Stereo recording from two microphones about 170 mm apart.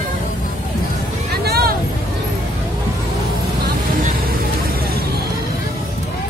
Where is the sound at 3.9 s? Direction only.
60° right (ahead or behind).